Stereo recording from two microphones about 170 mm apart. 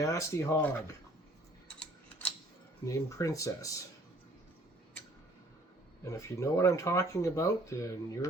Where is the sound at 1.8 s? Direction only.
10° left (ahead or behind).